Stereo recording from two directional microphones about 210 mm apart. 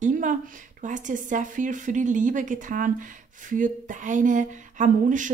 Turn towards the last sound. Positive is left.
turn(degrees=-35)  # may be behind; listen again after turning